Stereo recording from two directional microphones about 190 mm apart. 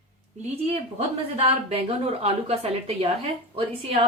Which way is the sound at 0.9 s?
30° right (ahead or behind).